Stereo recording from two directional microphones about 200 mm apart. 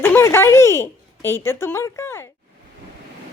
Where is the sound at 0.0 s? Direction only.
10° left (ahead or behind).